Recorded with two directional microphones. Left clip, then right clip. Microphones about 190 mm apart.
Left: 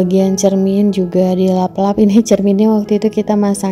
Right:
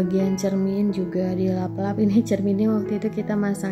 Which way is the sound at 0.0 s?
30° left (ahead or behind).